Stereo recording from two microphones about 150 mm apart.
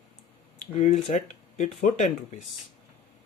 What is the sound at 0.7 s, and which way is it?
Speech, 45° left (ahead or behind).